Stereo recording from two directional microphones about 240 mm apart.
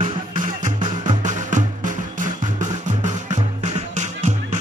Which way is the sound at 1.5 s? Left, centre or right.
Right.